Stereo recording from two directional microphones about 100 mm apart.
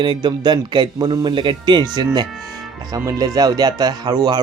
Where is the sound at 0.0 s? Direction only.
50° right (ahead or behind).